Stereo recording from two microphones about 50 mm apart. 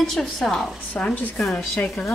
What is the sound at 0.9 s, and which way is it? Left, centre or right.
Speech, left.